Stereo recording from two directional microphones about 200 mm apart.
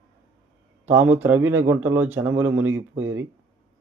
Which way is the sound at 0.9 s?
10° right (ahead or behind).